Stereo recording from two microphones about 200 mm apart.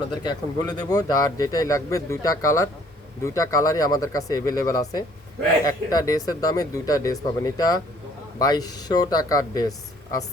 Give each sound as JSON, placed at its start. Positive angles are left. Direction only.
{"t": 0.2, "sound": "speech", "side_deg": 20}